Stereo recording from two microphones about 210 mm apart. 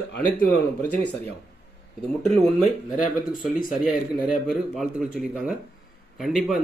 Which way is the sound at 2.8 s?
40° left (ahead or behind).